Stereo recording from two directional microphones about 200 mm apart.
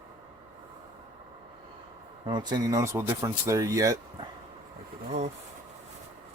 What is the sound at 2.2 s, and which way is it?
Speech, 20° right (ahead or behind).